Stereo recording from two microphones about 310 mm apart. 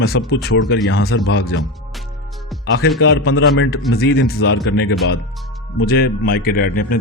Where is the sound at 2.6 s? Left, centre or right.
Left.